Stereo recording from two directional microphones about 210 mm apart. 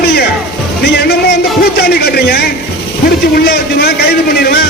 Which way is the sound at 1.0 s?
50° left (ahead or behind).